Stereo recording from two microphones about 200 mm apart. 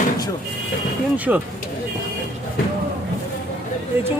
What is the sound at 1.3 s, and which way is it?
Speech, 5° right (ahead or behind).